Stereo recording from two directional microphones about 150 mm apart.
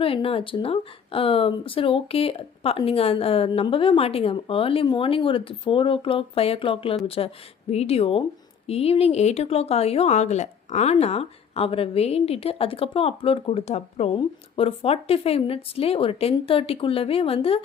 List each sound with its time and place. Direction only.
0.0 s speech: 40° left (ahead or behind)